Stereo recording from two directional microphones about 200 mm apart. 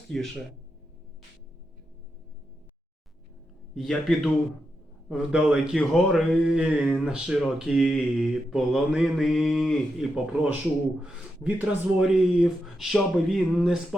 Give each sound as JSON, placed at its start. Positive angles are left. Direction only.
{"t": 3.8, "sound": "speech", "side_deg": 0}